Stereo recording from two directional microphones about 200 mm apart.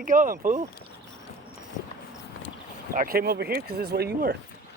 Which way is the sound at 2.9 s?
45° right (ahead or behind).